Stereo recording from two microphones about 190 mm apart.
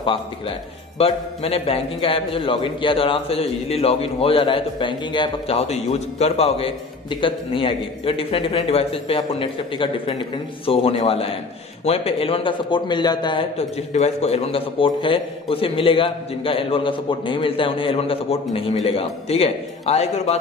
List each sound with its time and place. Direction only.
0.9 s a man's voice: 30° left (ahead or behind)
13.9 s a man's voice: 35° left (ahead or behind)